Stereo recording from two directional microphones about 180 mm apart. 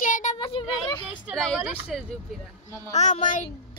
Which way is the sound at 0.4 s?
30° left (ahead or behind).